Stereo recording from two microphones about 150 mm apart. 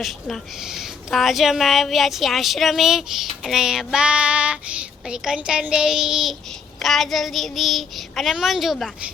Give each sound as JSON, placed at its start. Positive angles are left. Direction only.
{"t": 0.0, "sound": "a woman's voice", "side_deg": 0}